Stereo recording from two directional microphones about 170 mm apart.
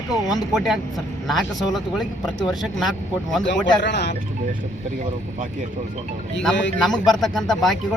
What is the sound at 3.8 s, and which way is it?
Speech, 90° left.